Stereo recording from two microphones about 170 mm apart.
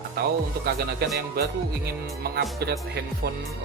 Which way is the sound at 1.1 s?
70° right (ahead or behind).